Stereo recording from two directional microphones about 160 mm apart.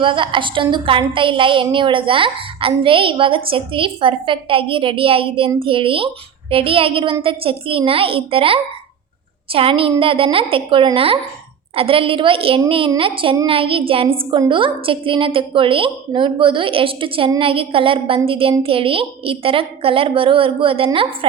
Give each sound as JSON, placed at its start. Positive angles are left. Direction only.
{"t": 0.0, "sound": "a woman's voice", "side_deg": -30}